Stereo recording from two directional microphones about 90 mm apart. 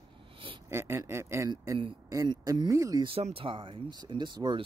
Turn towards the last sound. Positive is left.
turn(degrees=-55)  # may be behind; listen again after turning